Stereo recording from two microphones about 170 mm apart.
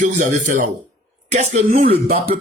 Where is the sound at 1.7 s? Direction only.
60° right (ahead or behind).